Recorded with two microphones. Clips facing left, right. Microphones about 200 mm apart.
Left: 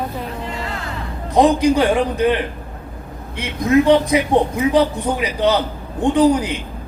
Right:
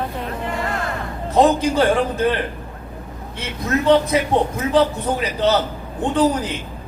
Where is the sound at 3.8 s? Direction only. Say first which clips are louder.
Left 1 dB; 15° left (ahead or behind).